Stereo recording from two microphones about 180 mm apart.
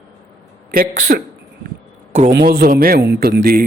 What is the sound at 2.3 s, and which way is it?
A man's voice, 60° right (ahead or behind).